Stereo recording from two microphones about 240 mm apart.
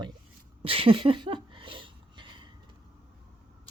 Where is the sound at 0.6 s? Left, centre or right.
Right.